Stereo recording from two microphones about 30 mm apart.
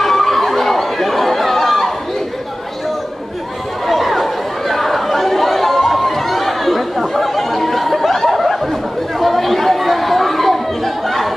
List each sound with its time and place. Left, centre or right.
0.0 s chatter: centre
3.8 s chatter: centre
8.3 s a sound: centre
9.2 s chatter: centre